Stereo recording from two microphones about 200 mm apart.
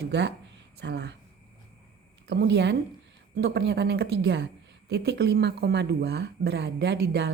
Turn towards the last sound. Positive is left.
turn(degrees=-55)  # may be behind; listen again after turning